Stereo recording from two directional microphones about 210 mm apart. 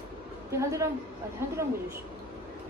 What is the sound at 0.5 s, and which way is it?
A woman's voice, 15° right (ahead or behind).